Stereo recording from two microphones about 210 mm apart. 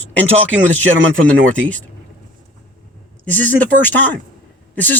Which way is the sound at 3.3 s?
10° left (ahead or behind).